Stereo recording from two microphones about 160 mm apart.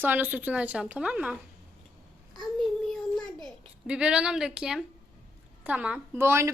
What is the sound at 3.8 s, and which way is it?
A woman's voice, 5° right (ahead or behind).